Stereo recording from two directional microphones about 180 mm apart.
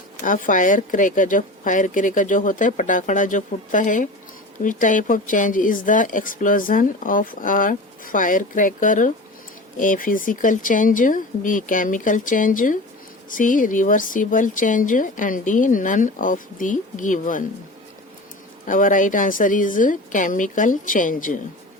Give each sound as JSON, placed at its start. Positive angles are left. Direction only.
{"t": 0.2, "sound": "speech", "side_deg": 45}
{"t": 18.6, "sound": "speech", "side_deg": 45}